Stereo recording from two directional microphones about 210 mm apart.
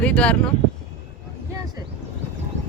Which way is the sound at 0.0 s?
5° left (ahead or behind).